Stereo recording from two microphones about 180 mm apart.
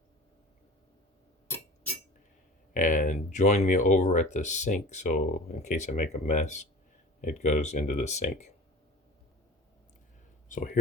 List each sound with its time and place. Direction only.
2.7 s speech: 45° left (ahead or behind)
10.5 s speech: 45° left (ahead or behind)